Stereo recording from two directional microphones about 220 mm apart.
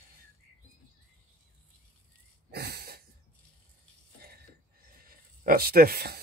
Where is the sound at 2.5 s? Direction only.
45° right (ahead or behind).